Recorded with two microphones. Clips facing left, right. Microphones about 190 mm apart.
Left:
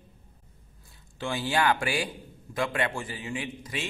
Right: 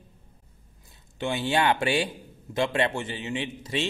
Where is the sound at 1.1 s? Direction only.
20° right (ahead or behind).